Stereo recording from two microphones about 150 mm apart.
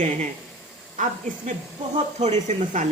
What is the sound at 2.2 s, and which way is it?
Speech, 50° right (ahead or behind).